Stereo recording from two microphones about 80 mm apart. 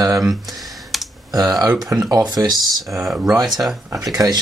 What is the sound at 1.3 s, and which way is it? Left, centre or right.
Speech, right.